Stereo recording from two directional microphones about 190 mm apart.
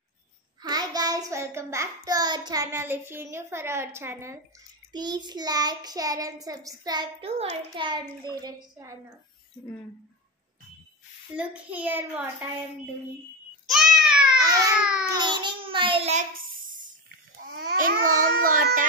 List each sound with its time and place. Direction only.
0.6 s child singing: 20° right (ahead or behind)
11.3 s child singing: 10° right (ahead or behind)
13.7 s a sound: centre (ahead or behind)
15.1 s a child's voice: 25° right (ahead or behind)
17.6 s a child's voice: 50° right (ahead or behind)